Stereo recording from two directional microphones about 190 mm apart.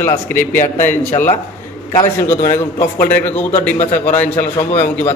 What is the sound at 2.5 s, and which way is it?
A man's voice, 10° left (ahead or behind).